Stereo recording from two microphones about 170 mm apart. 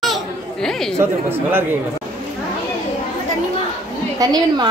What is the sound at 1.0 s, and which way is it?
Speech, 15° right (ahead or behind).